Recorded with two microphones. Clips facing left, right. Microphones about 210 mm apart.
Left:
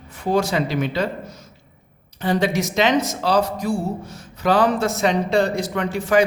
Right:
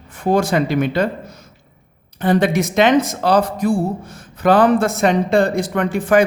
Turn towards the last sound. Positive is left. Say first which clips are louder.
# right 3 dB
turn(degrees=-50)  # may be behind; listen again after turning